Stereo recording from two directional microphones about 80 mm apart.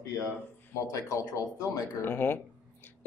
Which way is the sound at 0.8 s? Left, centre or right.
Left.